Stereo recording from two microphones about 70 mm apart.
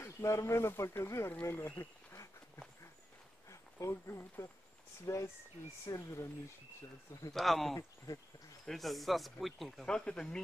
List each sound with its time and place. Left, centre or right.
0.0 s speech: left
1.8 s a sound: left
3.4 s speech: left
5.9 s speech: left
7.3 s speech: centre